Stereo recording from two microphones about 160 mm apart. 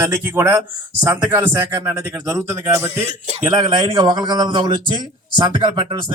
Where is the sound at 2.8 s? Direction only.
45° right (ahead or behind).